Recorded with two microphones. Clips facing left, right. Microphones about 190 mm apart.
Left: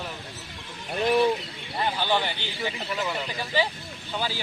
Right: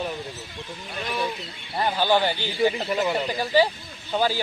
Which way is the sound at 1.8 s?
40° right (ahead or behind).